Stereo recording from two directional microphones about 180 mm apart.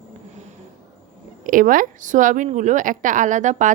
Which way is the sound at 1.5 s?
50° right (ahead or behind).